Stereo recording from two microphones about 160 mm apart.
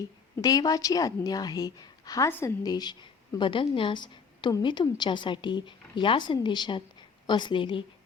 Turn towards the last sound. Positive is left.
turn(degrees=30)  # may be behind; listen again after turning